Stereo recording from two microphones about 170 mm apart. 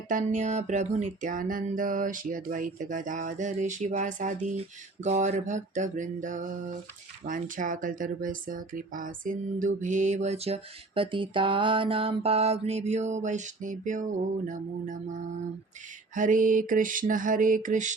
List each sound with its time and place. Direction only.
0.1 s speech: 50° right (ahead or behind)
16.1 s speech: 50° right (ahead or behind)